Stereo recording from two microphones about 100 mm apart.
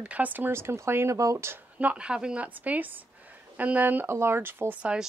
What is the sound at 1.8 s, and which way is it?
A woman's voice, 10° right (ahead or behind).